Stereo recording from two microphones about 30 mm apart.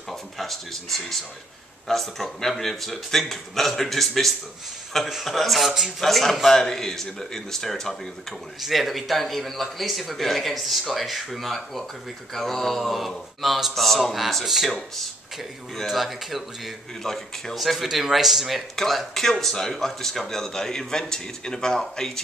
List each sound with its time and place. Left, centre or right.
0.1 s a man's voice: centre
5.9 s a man's voice: centre
6.5 s a man's voice: centre
8.5 s a man's voice: centre
13.4 s a man's voice: centre
15.9 s a man's voice: centre
17.0 s a man's voice: centre
17.6 s a man's voice: centre
18.8 s a man's voice: centre